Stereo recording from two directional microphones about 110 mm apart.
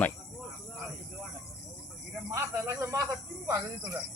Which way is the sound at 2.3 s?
25° right (ahead or behind).